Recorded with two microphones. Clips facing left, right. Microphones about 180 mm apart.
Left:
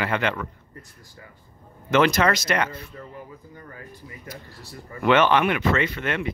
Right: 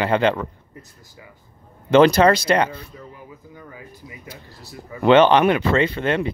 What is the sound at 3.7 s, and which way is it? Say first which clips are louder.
Speech: even; 10° right (ahead or behind).